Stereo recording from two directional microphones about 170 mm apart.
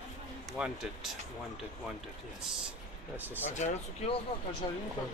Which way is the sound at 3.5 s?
40° left (ahead or behind).